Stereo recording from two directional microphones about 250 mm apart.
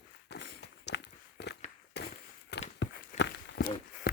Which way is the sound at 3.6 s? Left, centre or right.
Left.